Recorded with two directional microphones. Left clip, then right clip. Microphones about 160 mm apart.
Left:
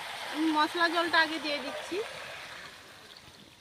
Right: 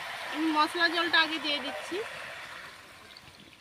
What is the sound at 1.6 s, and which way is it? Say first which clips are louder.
Speech: right 1 dB; 30° left (ahead or behind).